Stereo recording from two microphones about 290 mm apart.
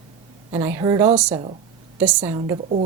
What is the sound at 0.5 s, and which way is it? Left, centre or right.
Speech, centre.